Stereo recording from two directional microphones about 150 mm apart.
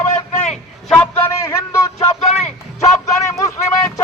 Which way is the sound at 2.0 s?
50° left (ahead or behind).